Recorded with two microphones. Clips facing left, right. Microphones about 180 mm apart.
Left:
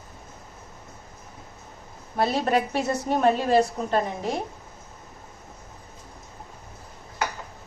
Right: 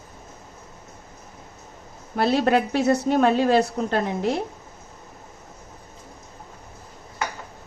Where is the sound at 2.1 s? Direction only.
80° right.